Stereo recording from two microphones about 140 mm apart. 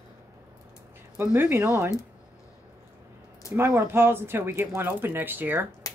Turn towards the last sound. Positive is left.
turn(degrees=-15)  # may be behind; listen again after turning